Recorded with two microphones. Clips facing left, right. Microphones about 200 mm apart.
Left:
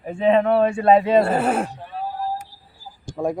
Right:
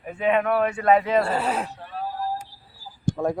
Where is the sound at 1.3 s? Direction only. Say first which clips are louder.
Left 5 dB; 50° left (ahead or behind).